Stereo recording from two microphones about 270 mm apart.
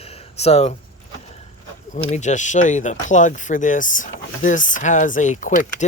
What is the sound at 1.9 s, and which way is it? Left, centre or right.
Speech, left.